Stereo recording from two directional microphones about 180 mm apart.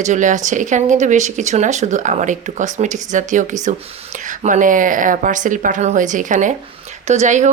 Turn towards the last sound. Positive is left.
turn(degrees=-40)  # may be behind; listen again after turning